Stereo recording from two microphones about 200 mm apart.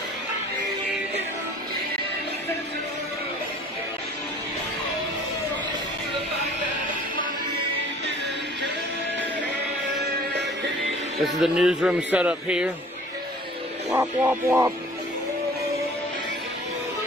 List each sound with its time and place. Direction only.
10.3 s music: 60° right (ahead or behind)
11.4 s a man's voice: 5° right (ahead or behind)
13.8 s speech: 10° right (ahead or behind)